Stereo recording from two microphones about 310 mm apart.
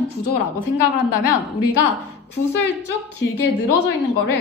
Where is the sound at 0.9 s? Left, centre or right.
Left.